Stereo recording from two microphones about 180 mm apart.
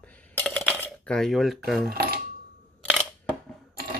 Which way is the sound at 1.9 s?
55° right (ahead or behind).